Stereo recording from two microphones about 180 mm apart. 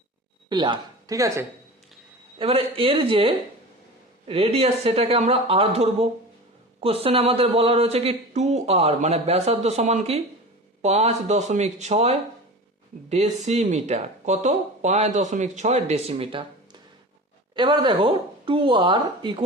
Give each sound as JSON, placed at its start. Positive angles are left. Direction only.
{"t": 0.5, "sound": "speech", "side_deg": -25}
{"t": 2.4, "sound": "speech", "side_deg": -30}